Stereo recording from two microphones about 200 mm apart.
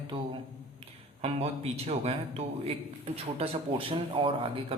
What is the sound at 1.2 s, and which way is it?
A man's voice, 30° right (ahead or behind).